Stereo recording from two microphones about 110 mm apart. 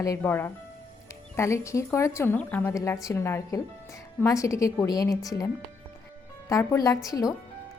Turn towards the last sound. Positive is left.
turn(degrees=30)  # may be behind; listen again after turning